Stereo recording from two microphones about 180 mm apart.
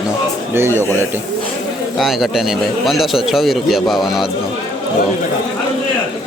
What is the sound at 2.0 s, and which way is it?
A man's voice, centre (ahead or behind).